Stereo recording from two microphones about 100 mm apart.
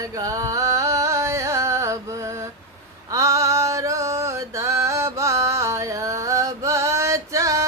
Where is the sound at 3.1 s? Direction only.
30° right (ahead or behind).